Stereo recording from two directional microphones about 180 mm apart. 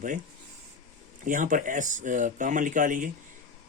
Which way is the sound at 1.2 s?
45° right (ahead or behind).